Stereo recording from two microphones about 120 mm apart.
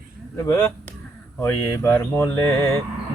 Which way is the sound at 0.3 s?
25° left (ahead or behind).